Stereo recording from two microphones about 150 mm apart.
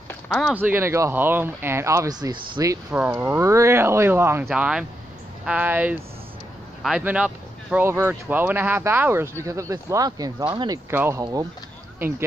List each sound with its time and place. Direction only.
0.1 s speech: 5° left (ahead or behind)
0.6 s speech: 15° right (ahead or behind)
2.9 s speech: 10° right (ahead or behind); by 10.8 s 30° right (ahead or behind)
10.9 s speech: 15° right (ahead or behind)